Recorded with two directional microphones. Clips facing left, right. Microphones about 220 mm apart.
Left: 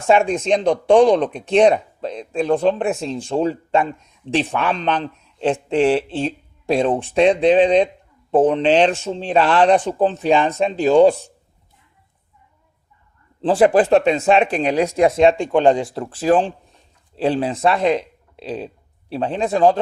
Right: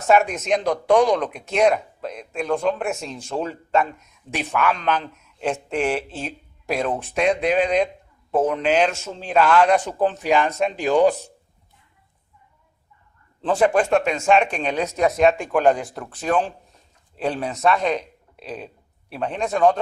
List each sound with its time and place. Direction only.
0.0 s speech: 30° left (ahead or behind)
13.4 s speech: 30° left (ahead or behind)